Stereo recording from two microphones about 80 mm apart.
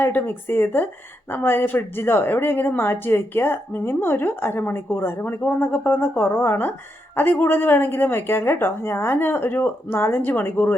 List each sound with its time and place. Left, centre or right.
0.0 s a woman's voice: left